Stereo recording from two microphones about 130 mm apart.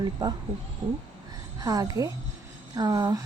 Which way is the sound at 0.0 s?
30° right (ahead or behind).